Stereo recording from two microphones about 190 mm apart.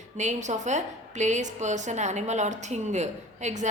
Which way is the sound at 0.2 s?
40° right (ahead or behind).